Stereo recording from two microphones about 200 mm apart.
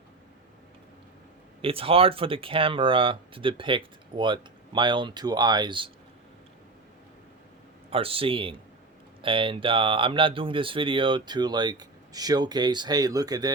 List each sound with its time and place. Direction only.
1.6 s speech: 30° right (ahead or behind)
7.9 s speech: 30° right (ahead or behind)